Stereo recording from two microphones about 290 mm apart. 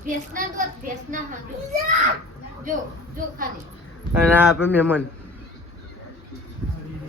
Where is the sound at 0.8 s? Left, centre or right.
Right.